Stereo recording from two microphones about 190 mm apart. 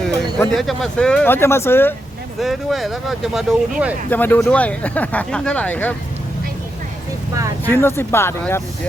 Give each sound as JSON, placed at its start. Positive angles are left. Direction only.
{"t": 0.5, "sound": "speech", "side_deg": 0}
{"t": 2.4, "sound": "speech", "side_deg": 0}
{"t": 4.1, "sound": "speech", "side_deg": 10}
{"t": 7.3, "sound": "vehicle", "side_deg": -15}
{"t": 7.7, "sound": "speech", "side_deg": 10}